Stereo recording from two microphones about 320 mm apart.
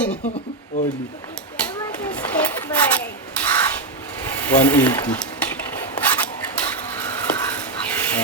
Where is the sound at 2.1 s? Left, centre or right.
Centre.